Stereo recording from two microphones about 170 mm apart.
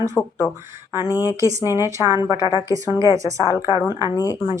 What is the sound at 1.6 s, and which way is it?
Speech, 15° right (ahead or behind).